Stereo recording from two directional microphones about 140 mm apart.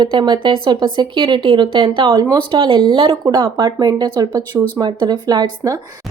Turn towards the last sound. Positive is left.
turn(degrees=-30)  # may be behind; listen again after turning